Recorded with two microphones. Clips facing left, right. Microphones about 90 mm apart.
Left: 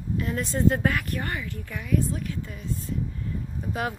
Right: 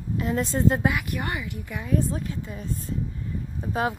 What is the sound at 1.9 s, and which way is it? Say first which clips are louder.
Speech: right 1 dB; 35° right (ahead or behind).